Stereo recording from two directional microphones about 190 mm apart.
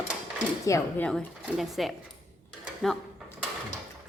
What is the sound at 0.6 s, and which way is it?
Speech, 15° left (ahead or behind).